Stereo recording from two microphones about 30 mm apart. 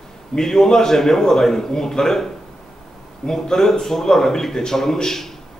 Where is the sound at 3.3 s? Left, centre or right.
Centre.